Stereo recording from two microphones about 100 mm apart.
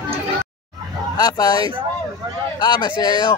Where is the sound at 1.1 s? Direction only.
40° left (ahead or behind).